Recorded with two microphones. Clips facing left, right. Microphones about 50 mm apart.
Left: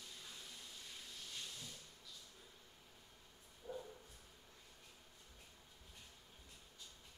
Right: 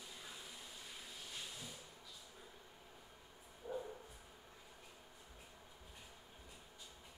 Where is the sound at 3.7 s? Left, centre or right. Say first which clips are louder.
Right 4 dB; centre.